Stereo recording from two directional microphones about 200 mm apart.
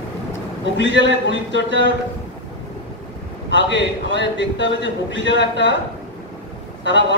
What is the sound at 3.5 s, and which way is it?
A man's voice, 65° left (ahead or behind).